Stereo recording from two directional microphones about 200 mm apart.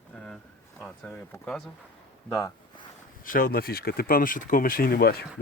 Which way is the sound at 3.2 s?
45° left (ahead or behind).